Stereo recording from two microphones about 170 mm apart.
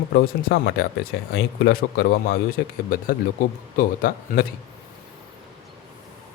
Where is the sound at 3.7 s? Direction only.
55° left (ahead or behind).